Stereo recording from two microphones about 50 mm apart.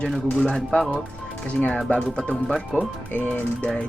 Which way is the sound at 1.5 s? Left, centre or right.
Left.